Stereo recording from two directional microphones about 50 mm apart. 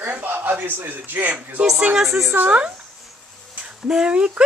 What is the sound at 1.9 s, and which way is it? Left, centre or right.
Speech, centre.